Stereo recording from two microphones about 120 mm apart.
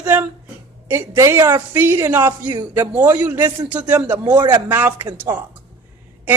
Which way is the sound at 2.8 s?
15° right (ahead or behind).